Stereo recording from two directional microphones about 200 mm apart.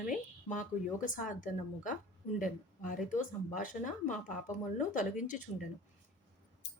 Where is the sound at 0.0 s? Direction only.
40° left (ahead or behind).